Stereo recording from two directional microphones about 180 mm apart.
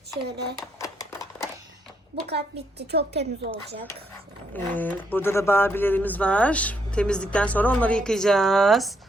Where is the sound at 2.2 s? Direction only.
65° right (ahead or behind).